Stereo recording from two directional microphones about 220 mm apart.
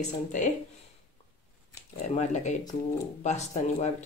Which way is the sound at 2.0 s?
30° left (ahead or behind).